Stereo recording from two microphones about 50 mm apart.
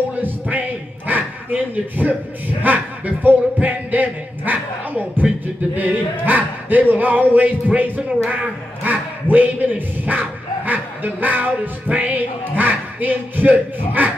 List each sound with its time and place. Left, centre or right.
0.1 s a man's voice: right